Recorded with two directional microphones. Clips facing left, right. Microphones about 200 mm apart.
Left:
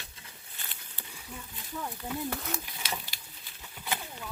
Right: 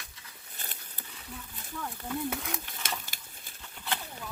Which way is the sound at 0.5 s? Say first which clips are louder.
Right 3 dB; 40° right (ahead or behind).